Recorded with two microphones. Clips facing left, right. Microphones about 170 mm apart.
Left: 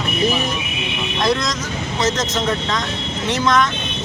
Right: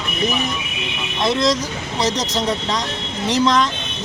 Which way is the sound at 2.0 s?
35° right (ahead or behind).